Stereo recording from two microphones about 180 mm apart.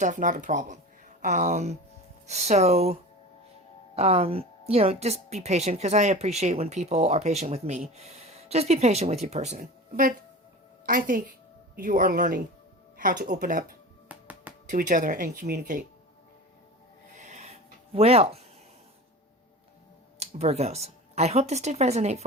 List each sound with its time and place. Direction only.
0.0 s a woman's voice: 45° right (ahead or behind)
9.9 s speech: 50° right (ahead or behind)
14.1 s music: 10° right (ahead or behind)
14.7 s speech: 45° right (ahead or behind)
17.2 s a sound: 40° right (ahead or behind)
20.1 s speech: 35° right (ahead or behind)